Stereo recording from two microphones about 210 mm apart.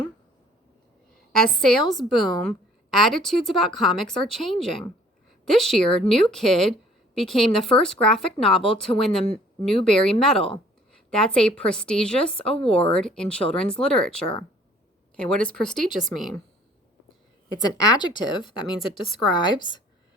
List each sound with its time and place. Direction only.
2.0 s speech: centre (ahead or behind)
10.3 s a woman's voice: 25° left (ahead or behind)
10.9 s speech: 5° left (ahead or behind)
17.5 s a woman's voice: 15° left (ahead or behind)